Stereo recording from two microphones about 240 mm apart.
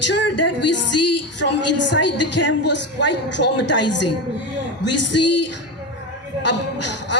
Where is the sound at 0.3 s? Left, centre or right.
Left.